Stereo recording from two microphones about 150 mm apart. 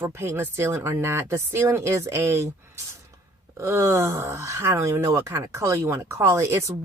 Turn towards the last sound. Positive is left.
turn(degrees=-20)  # may be behind; listen again after turning